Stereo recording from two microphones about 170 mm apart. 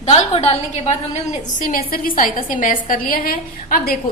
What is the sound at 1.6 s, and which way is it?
A woman's voice, 55° left (ahead or behind).